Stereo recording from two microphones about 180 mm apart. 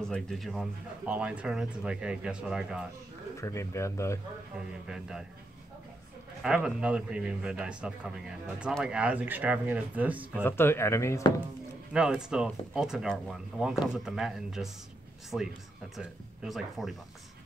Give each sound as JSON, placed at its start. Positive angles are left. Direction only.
{"t": 0.0, "sound": "a man's voice", "side_deg": 5}
{"t": 3.3, "sound": "speech", "side_deg": 15}
{"t": 4.6, "sound": "a man's voice", "side_deg": -5}
{"t": 6.4, "sound": "a man's voice", "side_deg": -5}
{"t": 10.4, "sound": "speech", "side_deg": 15}
{"t": 11.9, "sound": "a man's voice", "side_deg": -5}